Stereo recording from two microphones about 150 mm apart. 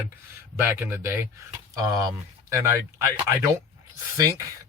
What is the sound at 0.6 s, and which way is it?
Speech, 15° right (ahead or behind).